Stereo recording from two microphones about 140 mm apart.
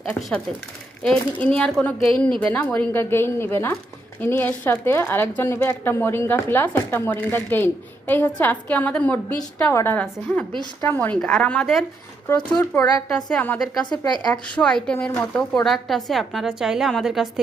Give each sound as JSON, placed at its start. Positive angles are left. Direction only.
{"t": 0.0, "sound": "a woman's voice", "side_deg": 10}
{"t": 13.1, "sound": "a woman's voice", "side_deg": 5}
{"t": 13.9, "sound": "speech", "side_deg": 30}
{"t": 14.4, "sound": "a woman's voice", "side_deg": 10}